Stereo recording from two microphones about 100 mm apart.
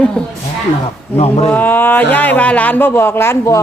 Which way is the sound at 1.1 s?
90° left.